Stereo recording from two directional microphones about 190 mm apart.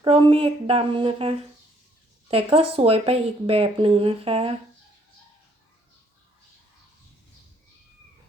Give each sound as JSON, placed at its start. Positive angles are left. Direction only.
{"t": 0.0, "sound": "speech", "side_deg": -30}